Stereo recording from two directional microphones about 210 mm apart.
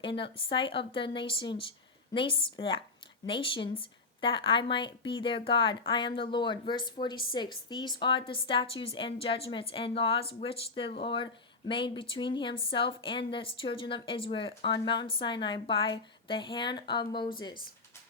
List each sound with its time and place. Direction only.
0.0 s speech: 25° left (ahead or behind)